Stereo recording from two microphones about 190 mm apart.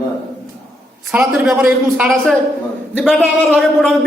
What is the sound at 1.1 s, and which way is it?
A man's voice, 5° right (ahead or behind).